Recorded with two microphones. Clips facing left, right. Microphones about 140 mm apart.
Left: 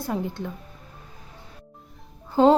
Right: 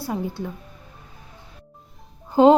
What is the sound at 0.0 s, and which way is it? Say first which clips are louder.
Speech: right 1 dB; 5° right (ahead or behind).